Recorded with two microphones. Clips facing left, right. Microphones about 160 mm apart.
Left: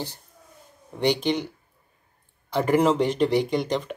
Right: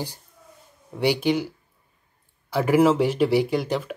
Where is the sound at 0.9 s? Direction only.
10° right (ahead or behind).